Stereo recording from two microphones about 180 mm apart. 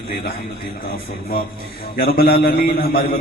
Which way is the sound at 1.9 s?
55° left (ahead or behind).